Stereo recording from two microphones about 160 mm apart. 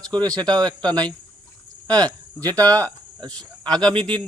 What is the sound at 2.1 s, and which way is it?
Speech, 10° left (ahead or behind).